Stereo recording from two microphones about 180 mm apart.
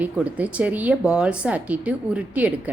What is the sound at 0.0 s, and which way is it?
A woman's voice, 10° right (ahead or behind).